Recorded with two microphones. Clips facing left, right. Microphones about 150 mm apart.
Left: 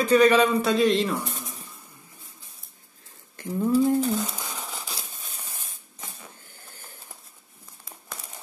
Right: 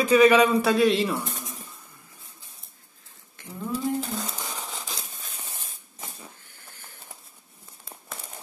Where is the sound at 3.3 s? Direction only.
45° left (ahead or behind).